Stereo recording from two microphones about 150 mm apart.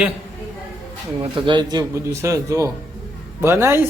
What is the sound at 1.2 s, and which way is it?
A man's voice, 35° right (ahead or behind).